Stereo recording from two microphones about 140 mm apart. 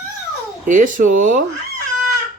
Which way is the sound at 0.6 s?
65° right (ahead or behind).